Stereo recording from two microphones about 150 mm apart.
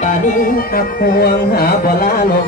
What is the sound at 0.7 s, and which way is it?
Music, 90° left.